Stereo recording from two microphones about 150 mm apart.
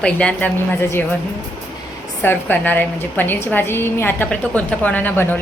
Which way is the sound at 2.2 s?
15° left (ahead or behind).